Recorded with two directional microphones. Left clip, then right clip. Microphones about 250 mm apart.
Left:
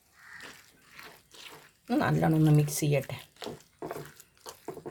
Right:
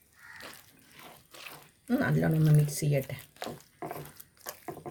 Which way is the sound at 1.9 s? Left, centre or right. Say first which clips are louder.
Left 2 dB; left.